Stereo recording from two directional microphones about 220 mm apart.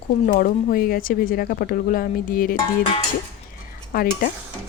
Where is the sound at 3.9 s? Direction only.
40° left (ahead or behind).